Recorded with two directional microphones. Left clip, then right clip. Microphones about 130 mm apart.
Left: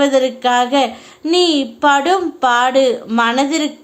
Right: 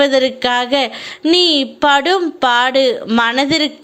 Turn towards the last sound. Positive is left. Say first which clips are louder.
# right 1 dB
turn(degrees=-25)  # may be behind; listen again after turning